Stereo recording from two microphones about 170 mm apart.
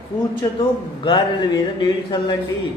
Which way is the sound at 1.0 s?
30° left (ahead or behind).